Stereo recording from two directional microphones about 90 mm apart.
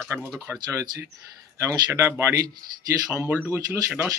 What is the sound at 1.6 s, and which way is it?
Speech, 30° right (ahead or behind).